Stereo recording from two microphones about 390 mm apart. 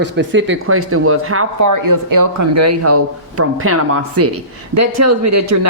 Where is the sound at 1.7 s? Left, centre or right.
Right.